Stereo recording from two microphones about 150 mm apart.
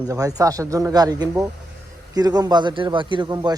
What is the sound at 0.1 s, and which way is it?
A man's voice, 25° right (ahead or behind).